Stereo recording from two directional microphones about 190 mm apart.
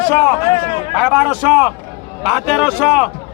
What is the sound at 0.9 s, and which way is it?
A man's voice, 5° right (ahead or behind).